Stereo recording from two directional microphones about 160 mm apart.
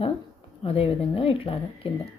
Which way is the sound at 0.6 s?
35° left (ahead or behind).